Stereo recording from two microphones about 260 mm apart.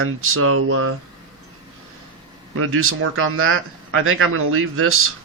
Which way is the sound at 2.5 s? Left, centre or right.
Right.